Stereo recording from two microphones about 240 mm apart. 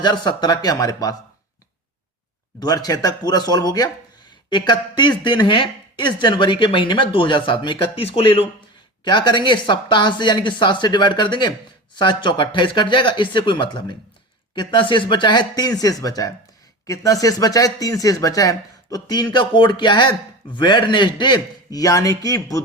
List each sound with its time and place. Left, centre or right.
0.0 s speech: centre
2.6 s speech: centre